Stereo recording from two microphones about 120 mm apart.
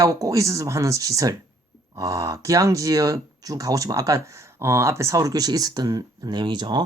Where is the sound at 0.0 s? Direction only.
30° right (ahead or behind).